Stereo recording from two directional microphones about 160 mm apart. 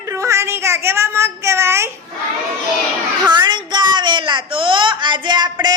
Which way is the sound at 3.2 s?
25° right (ahead or behind).